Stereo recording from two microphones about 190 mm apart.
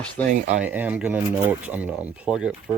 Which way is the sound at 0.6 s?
10° right (ahead or behind).